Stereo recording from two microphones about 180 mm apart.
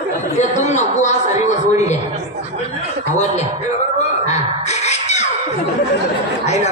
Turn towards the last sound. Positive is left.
turn(degrees=40)  # may be behind; listen again after turning